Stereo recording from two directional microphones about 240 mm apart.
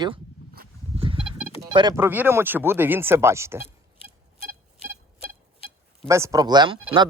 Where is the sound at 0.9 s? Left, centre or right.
Right.